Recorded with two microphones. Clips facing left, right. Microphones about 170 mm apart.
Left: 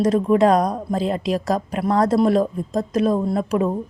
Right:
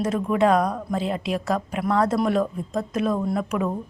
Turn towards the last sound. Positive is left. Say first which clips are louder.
# left 4 dB
turn(degrees=35)  # may be behind; listen again after turning